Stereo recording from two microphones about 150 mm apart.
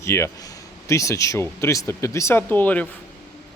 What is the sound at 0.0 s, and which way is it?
A man's voice, 20° left (ahead or behind).